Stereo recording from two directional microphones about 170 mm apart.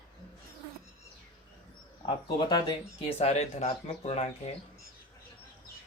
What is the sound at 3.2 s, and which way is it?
Speech, 40° left (ahead or behind).